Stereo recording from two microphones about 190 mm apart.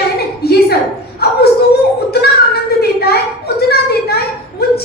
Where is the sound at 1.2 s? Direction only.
55° left (ahead or behind).